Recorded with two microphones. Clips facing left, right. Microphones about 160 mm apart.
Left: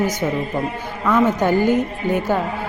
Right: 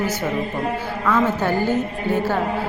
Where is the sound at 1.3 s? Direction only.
15° left (ahead or behind).